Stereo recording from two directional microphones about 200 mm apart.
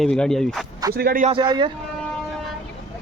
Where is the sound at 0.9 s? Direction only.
45° right (ahead or behind).